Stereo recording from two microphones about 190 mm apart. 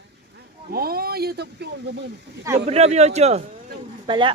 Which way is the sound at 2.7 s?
35° right (ahead or behind).